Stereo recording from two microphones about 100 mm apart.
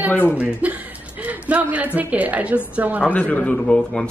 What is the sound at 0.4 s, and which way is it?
Chuckle, 15° right (ahead or behind).